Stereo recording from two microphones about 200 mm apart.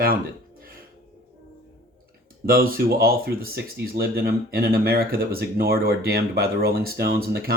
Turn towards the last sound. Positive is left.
turn(degrees=-50)  # may be behind; listen again after turning